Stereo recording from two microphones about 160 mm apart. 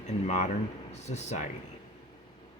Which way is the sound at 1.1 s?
40° left (ahead or behind).